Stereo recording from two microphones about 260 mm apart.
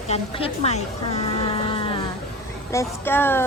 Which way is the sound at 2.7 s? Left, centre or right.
Centre.